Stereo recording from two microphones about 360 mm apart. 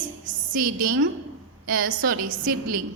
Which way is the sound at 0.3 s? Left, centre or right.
Right.